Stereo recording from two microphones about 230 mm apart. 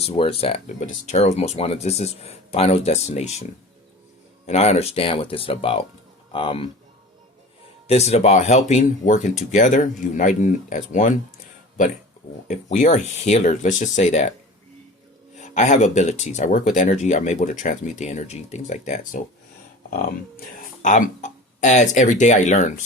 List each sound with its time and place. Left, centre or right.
0.0 s speech: left
4.4 s speech: left
7.9 s speech: left
12.5 s speech: left
15.4 s speech: left
20.8 s speech: left